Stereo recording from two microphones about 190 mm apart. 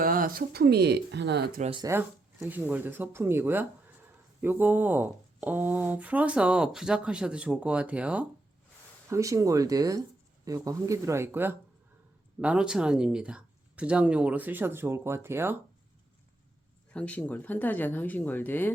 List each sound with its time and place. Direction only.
0.0 s speech: 45° right (ahead or behind)
1.8 s speech: 10° right (ahead or behind)
16.9 s speech: 5° left (ahead or behind)